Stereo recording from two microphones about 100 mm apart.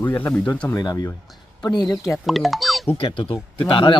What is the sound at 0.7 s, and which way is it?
Speech, 40° left (ahead or behind).